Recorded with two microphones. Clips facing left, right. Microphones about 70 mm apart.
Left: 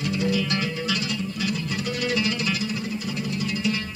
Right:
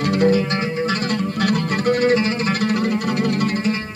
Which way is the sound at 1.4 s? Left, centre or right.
Right.